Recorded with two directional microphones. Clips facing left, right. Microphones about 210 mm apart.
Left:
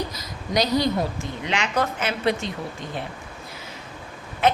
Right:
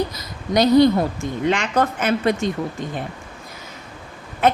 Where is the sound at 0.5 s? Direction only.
55° right (ahead or behind).